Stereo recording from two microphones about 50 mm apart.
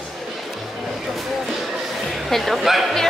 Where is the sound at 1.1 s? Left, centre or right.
Centre.